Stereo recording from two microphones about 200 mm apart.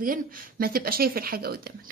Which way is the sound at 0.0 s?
45° right (ahead or behind).